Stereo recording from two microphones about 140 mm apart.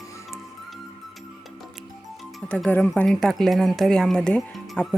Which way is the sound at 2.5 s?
10° left (ahead or behind).